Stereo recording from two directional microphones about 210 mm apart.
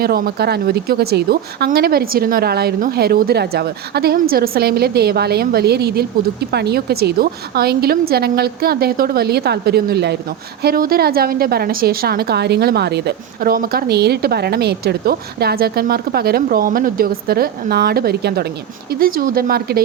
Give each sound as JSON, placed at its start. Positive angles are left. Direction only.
{"t": 0.0, "sound": "speech", "side_deg": -45}